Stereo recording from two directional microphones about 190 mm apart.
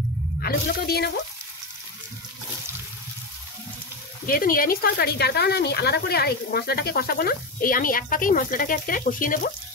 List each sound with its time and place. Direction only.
0.4 s speech: 55° left (ahead or behind)
4.3 s speech: 50° left (ahead or behind)